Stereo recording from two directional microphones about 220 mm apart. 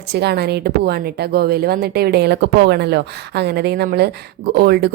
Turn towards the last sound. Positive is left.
turn(degrees=-45)  # may be behind; listen again after turning